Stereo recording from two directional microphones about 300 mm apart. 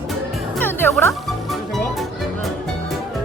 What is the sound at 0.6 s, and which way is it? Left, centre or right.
Music, centre.